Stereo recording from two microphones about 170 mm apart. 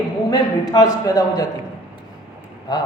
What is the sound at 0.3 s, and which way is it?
A man's voice, 25° left (ahead or behind).